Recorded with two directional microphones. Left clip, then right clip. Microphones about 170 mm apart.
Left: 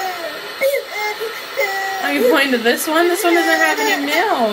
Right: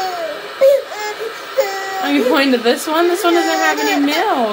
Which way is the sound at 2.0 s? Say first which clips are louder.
Even; 25° right (ahead or behind).